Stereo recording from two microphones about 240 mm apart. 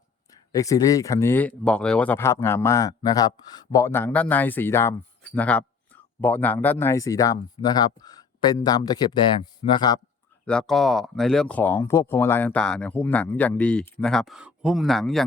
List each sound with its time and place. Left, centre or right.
0.5 s speech: centre
10.4 s speech: centre